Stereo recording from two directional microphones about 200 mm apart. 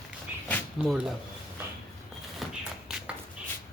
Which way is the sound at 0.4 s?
5° left (ahead or behind).